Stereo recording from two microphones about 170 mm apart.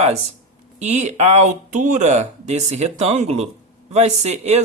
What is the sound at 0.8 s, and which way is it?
Speech, 40° right (ahead or behind).